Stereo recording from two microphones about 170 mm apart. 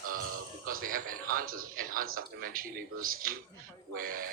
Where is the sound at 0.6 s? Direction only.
55° right (ahead or behind).